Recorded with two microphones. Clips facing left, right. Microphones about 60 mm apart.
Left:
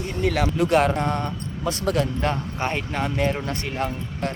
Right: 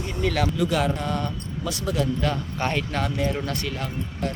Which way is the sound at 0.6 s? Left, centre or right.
Left.